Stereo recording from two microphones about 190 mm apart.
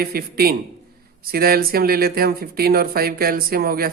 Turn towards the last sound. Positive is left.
turn(degrees=-50)  # may be behind; listen again after turning